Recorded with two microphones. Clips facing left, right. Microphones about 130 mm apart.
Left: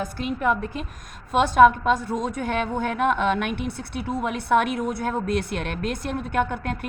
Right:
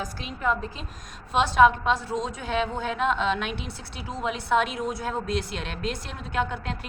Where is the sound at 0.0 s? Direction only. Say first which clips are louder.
Left 4 dB; 55° left (ahead or behind).